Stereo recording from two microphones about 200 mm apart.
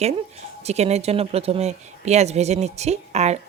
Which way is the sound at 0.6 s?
35° right (ahead or behind).